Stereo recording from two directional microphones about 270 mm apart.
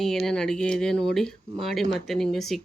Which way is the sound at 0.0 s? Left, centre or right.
Centre.